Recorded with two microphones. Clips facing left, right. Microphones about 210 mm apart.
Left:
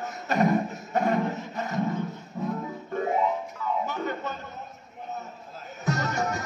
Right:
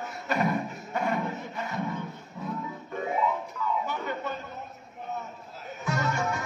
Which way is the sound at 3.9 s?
45° left (ahead or behind).